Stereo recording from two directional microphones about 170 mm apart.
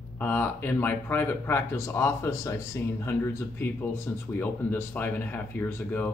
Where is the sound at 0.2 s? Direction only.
10° left (ahead or behind).